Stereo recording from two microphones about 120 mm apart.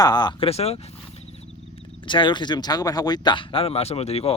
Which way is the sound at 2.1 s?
40° left (ahead or behind).